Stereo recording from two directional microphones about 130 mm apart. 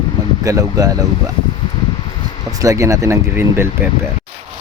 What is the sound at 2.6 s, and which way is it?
Speech, 25° right (ahead or behind).